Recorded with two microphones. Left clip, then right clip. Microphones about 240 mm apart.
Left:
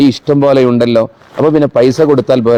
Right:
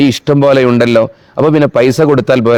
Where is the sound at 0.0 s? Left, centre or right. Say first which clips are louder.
Even; right.